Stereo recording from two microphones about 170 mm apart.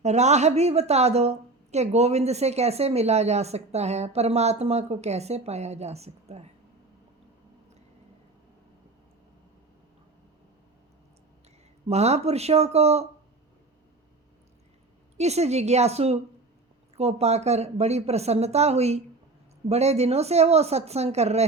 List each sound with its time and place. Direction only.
0.0 s a woman's voice: 40° right (ahead or behind)
11.9 s a woman's voice: 40° right (ahead or behind)
15.2 s a woman's voice: 40° right (ahead or behind)